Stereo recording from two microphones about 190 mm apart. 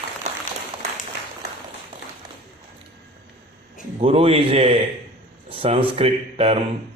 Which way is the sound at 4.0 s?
30° right (ahead or behind).